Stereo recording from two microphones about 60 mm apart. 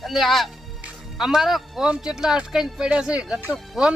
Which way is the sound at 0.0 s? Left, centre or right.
Centre.